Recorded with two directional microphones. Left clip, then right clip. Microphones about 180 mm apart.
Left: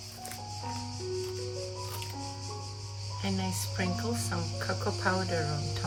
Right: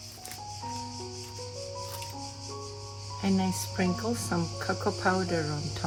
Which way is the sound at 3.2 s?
20° right (ahead or behind).